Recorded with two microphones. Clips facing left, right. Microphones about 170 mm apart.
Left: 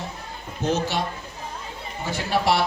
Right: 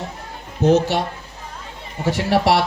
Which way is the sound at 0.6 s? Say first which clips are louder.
Right 8 dB; 65° right (ahead or behind).